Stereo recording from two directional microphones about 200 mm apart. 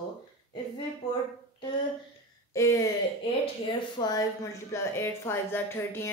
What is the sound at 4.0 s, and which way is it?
Speech, 20° left (ahead or behind).